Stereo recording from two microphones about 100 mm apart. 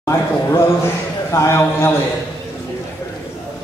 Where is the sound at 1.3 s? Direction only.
25° left (ahead or behind).